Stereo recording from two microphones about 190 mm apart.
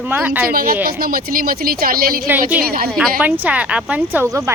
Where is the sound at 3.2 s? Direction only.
10° right (ahead or behind).